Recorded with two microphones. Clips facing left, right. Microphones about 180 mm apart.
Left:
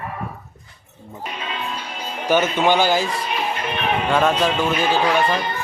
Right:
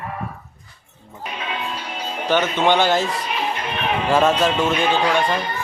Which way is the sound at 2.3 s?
10° left (ahead or behind).